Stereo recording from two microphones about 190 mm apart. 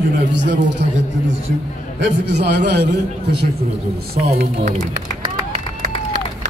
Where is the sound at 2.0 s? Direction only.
65° right (ahead or behind).